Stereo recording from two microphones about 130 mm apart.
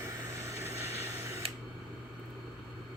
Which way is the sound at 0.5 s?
20° right (ahead or behind).